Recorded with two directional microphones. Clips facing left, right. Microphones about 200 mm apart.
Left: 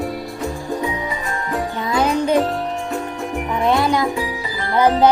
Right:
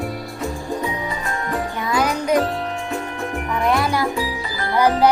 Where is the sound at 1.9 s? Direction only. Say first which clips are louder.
Left 2 dB; 25° left (ahead or behind).